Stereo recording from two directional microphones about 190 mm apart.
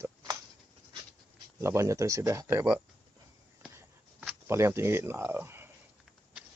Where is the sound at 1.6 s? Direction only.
15° right (ahead or behind).